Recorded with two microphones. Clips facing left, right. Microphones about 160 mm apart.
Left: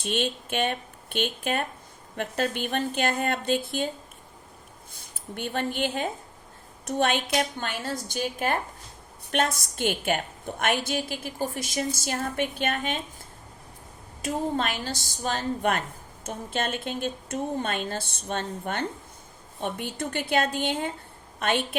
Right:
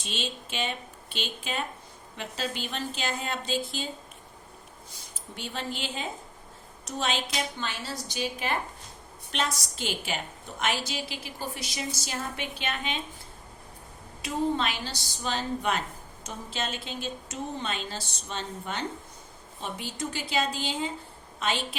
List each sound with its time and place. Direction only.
0.0 s a woman's voice: 55° left (ahead or behind)
4.9 s a woman's voice: 55° left (ahead or behind)
14.2 s a woman's voice: 45° left (ahead or behind)